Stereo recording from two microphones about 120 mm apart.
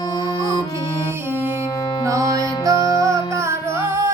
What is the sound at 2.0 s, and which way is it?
Music, 25° right (ahead or behind).